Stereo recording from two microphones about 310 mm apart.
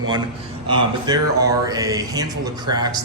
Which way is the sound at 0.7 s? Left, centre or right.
Centre.